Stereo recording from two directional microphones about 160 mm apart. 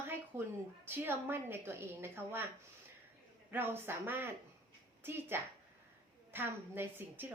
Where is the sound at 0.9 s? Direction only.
15° right (ahead or behind).